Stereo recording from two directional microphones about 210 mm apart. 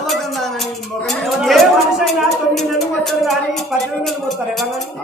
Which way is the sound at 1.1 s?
Centre (ahead or behind).